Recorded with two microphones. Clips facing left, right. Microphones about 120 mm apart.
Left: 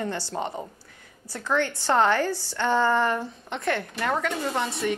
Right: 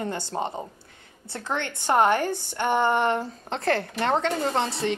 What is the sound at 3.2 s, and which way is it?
Speech, 30° right (ahead or behind).